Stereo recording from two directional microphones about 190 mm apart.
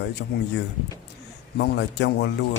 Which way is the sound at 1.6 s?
60° left (ahead or behind).